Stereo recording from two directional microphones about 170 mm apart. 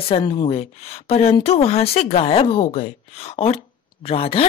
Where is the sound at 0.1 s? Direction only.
30° left (ahead or behind).